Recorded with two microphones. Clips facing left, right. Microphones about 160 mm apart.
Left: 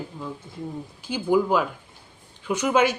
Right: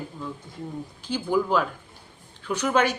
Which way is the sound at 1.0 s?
10° left (ahead or behind).